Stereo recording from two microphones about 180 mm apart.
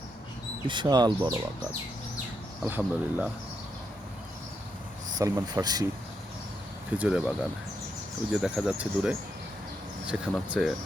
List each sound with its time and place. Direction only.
0.7 s speech: 25° right (ahead or behind)
2.6 s speech: 10° right (ahead or behind)
5.1 s speech: 20° right (ahead or behind)
7.0 s speech: 5° right (ahead or behind)